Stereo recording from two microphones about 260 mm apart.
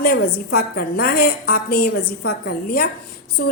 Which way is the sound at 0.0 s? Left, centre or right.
Left.